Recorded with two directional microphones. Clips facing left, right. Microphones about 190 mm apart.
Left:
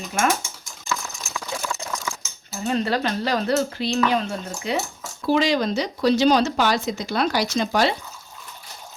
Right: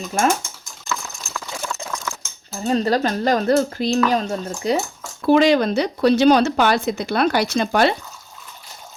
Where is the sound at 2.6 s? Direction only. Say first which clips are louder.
Right 4 dB; 35° right (ahead or behind).